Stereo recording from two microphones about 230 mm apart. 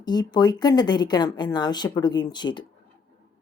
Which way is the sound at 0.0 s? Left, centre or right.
Centre.